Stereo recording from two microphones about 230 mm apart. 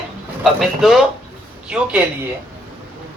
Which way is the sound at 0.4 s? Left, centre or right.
Centre.